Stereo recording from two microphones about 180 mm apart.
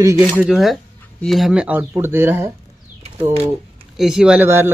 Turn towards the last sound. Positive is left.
turn(degrees=-10)  # may be behind; listen again after turning